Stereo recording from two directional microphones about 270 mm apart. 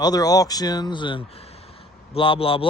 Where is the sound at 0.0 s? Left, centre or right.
Centre.